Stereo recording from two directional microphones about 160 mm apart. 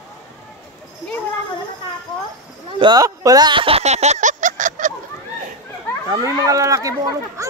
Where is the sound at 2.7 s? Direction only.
25° right (ahead or behind); by 4.9 s 55° right (ahead or behind).